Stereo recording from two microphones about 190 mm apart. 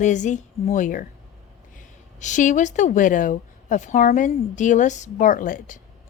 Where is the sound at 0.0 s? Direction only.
40° left (ahead or behind).